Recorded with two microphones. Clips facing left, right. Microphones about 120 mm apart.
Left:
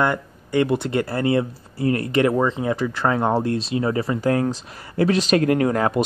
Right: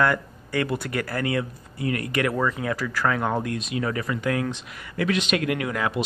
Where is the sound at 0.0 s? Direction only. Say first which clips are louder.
Left 1 dB; 20° left (ahead or behind).